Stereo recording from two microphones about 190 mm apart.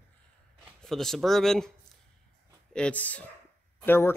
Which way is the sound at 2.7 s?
5° left (ahead or behind).